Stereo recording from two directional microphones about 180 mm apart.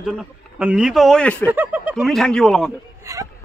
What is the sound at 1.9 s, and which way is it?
Speech, centre (ahead or behind).